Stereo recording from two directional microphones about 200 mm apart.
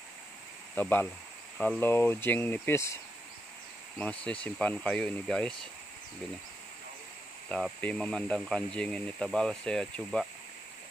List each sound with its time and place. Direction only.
0.7 s speech: 10° left (ahead or behind)
4.0 s speech: 5° left (ahead or behind)
7.4 s speech: 5° left (ahead or behind)